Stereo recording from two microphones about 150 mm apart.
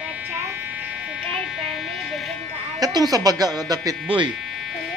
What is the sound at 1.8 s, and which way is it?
Music, centre (ahead or behind).